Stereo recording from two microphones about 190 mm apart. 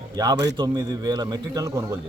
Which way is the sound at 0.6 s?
20° right (ahead or behind).